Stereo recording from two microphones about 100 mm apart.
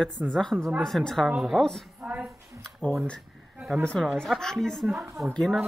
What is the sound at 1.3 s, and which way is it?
Speech, 10° right (ahead or behind).